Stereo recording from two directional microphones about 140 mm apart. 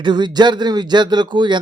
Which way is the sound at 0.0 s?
30° right (ahead or behind).